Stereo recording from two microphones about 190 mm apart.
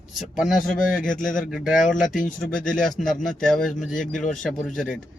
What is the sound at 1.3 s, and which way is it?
Speech, centre (ahead or behind).